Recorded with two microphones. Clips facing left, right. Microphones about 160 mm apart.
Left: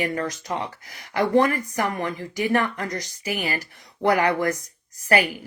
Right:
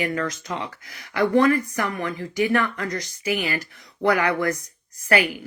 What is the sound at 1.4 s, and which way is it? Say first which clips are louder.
Speech: right 1 dB; 20° left (ahead or behind).